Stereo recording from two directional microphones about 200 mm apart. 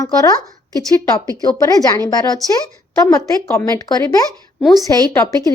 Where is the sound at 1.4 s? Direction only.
20° left (ahead or behind).